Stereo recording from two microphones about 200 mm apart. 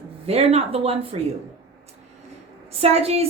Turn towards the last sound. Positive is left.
turn(degrees=-30)  # may be behind; listen again after turning